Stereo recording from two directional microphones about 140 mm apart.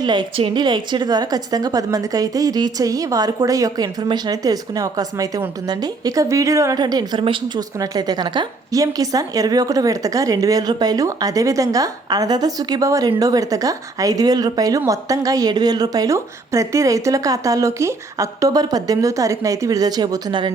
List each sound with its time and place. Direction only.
0.0 s a woman's voice: 30° right (ahead or behind)